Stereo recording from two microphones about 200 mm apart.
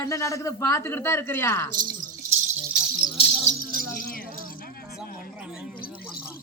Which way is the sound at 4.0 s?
45° left (ahead or behind).